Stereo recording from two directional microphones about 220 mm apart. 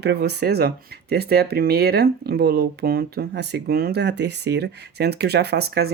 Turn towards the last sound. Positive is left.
turn(degrees=-45)  # may be behind; listen again after turning